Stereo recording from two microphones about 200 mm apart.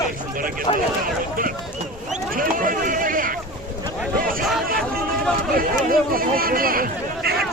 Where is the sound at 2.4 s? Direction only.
45° right (ahead or behind).